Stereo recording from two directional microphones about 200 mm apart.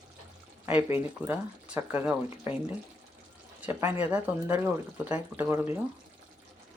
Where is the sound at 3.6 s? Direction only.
10° right (ahead or behind).